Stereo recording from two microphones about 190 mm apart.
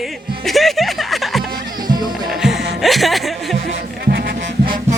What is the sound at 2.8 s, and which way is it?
Speech, centre (ahead or behind).